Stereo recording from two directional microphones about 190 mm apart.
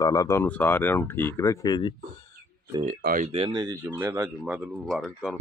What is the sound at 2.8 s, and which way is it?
Speech, 45° right (ahead or behind).